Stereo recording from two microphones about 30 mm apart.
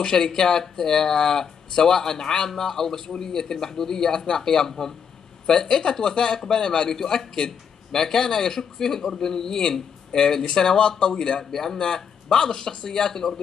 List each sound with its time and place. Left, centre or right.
0.0 s speech: centre
7.0 s speech: centre
11.5 s speech: centre
11.8 s speech: left